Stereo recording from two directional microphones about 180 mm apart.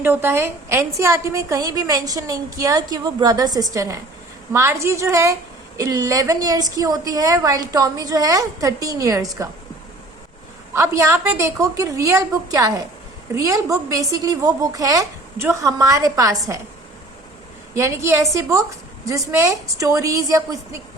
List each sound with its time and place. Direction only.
0.0 s a woman's voice: 10° right (ahead or behind)
10.8 s a woman's voice: 15° right (ahead or behind)
17.7 s a woman's voice: 15° right (ahead or behind)